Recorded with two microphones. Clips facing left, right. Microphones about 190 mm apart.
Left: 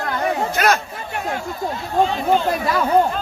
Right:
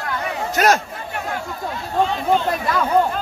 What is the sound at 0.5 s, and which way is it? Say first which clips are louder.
Speech: right 4 dB; 40° right (ahead or behind).